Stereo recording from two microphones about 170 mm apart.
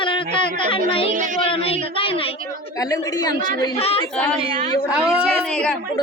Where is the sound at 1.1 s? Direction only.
50° right (ahead or behind).